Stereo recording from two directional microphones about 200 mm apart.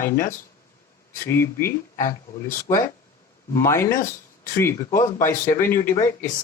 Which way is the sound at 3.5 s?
15° left (ahead or behind).